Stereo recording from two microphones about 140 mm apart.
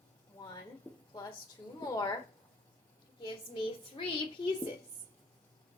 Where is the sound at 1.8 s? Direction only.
25° left (ahead or behind).